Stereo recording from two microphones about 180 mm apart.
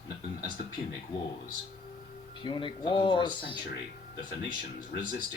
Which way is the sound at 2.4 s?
25° left (ahead or behind).